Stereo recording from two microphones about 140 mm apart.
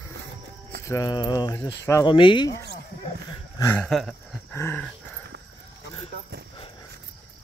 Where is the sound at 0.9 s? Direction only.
25° left (ahead or behind).